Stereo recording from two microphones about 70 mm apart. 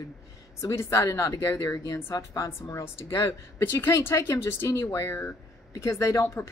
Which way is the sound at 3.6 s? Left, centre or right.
Left.